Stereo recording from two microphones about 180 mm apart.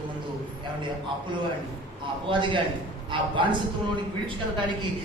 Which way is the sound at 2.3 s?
25° right (ahead or behind).